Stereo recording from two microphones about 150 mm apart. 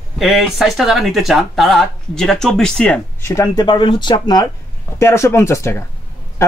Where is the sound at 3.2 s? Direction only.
20° left (ahead or behind).